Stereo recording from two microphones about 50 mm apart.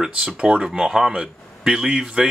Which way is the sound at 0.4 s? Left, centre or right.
Centre.